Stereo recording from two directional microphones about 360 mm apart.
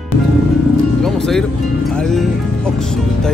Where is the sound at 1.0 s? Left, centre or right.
Centre.